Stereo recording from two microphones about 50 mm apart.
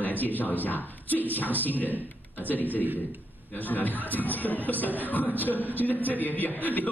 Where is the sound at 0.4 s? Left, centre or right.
Left.